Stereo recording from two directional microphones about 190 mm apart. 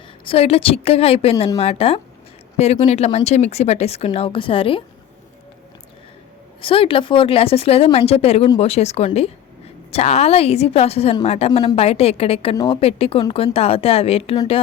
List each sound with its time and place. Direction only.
0.3 s speech: 30° left (ahead or behind)
6.6 s speech: 30° left (ahead or behind)